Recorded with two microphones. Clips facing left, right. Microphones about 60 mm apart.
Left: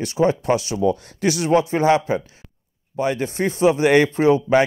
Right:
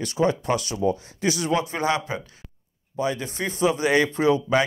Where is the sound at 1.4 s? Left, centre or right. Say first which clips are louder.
Left 9 dB; left.